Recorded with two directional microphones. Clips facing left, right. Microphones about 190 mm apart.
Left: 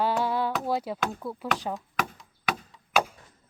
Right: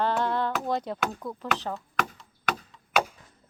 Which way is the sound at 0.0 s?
5° left (ahead or behind).